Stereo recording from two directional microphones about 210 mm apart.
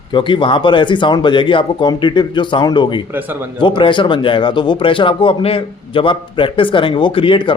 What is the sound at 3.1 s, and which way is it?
Speech, 10° right (ahead or behind).